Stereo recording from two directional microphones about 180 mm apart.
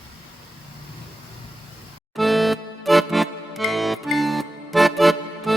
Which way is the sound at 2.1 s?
Centre (ahead or behind).